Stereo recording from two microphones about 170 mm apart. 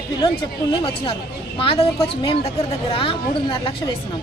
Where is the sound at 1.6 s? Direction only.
30° left (ahead or behind).